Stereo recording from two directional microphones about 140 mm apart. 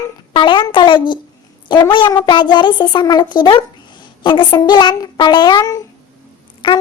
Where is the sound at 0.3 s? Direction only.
35° left (ahead or behind).